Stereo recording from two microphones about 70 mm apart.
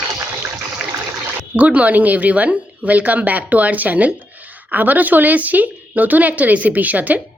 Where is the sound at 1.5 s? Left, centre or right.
Right.